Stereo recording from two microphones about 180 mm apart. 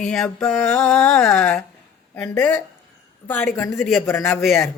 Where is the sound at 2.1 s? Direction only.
10° left (ahead or behind).